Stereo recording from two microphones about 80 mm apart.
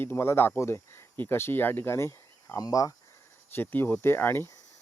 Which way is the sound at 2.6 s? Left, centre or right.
Left.